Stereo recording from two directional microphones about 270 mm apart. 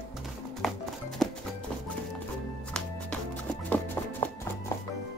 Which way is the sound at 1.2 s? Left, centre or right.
Centre.